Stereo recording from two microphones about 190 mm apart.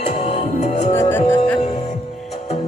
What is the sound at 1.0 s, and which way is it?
Music, 10° left (ahead or behind).